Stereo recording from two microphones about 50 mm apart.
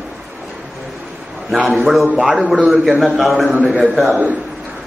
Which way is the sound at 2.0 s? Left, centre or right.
Right.